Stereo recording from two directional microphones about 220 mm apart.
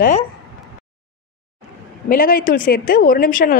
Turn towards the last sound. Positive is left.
turn(degrees=40)  # may be behind; listen again after turning